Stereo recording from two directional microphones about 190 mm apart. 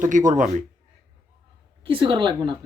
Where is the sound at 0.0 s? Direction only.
40° right (ahead or behind).